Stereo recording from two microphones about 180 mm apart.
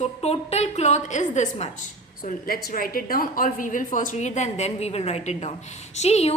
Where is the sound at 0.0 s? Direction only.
35° left (ahead or behind).